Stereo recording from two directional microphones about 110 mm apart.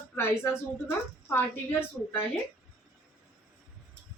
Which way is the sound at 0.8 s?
20° left (ahead or behind).